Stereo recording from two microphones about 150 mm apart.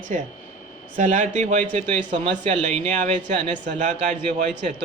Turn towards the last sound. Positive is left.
turn(degrees=-55)  # may be behind; listen again after turning